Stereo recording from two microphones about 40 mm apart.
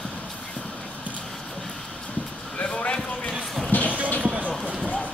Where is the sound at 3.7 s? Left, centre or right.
Left.